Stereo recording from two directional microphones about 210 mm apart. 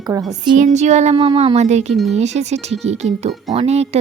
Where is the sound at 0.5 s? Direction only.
35° right (ahead or behind).